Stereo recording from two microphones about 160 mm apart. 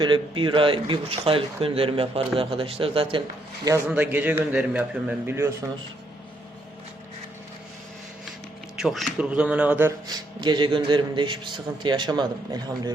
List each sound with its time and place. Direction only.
0.0 s speech: 30° right (ahead or behind)
3.7 s a man's voice: 10° right (ahead or behind)
8.8 s a man's voice: centre (ahead or behind)
10.1 s a man's voice: 25° right (ahead or behind)